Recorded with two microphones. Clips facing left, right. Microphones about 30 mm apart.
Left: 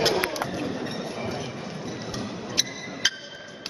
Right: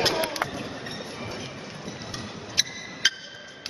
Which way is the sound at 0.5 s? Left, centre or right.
Centre.